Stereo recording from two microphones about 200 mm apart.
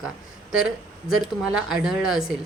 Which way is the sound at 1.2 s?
Centre (ahead or behind).